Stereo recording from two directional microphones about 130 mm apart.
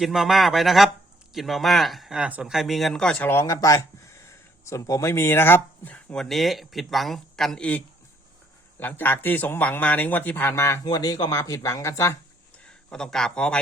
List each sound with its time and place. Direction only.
0.0 s speech: centre (ahead or behind)
8.8 s speech: 15° left (ahead or behind)
10.8 s speech: 30° left (ahead or behind)
12.6 s a man's voice: 5° left (ahead or behind)